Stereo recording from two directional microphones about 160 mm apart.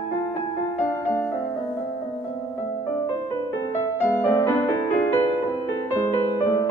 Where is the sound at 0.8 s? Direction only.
15° left (ahead or behind).